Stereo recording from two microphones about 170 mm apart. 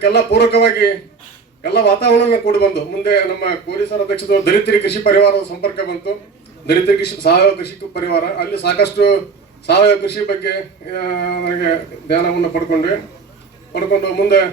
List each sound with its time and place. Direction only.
0.0 s a man's voice: 85° left